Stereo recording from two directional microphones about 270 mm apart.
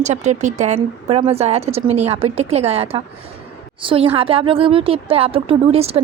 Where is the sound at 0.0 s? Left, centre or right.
Right.